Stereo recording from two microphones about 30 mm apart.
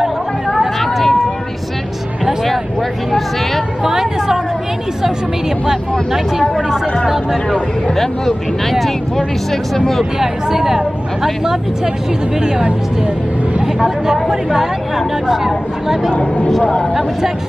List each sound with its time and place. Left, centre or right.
0.7 s a sound: centre
3.8 s a sound: centre
5.7 s speech: centre
7.9 s speech: centre
10.1 s speech: centre
13.7 s speech: centre
16.1 s speech: left